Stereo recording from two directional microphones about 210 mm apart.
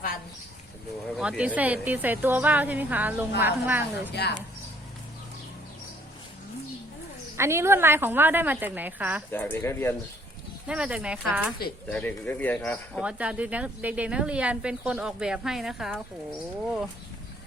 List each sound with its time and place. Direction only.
1.1 s a woman's voice: 5° right (ahead or behind)
4.1 s speech: 50° left (ahead or behind)
7.3 s a woman's voice: 10° right (ahead or behind)
9.3 s speech: 10° left (ahead or behind)
10.7 s speech: 5° right (ahead or behind)
11.9 s speech: 5° left (ahead or behind)
13.0 s speech: 5° right (ahead or behind)